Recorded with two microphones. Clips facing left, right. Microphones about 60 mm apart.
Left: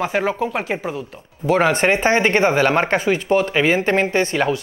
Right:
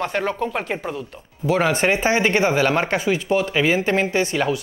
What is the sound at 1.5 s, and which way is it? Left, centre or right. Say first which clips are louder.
Speech: left 3 dB; left.